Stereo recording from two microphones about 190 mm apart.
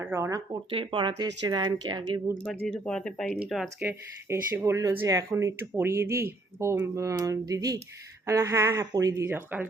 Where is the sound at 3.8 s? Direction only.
10° right (ahead or behind).